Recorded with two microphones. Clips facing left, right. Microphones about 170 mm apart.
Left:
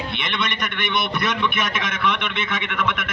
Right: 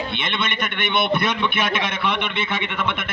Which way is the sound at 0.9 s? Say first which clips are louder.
Right 3 dB; 30° right (ahead or behind).